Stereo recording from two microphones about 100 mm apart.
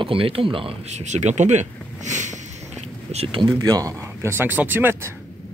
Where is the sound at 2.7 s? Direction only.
90° right.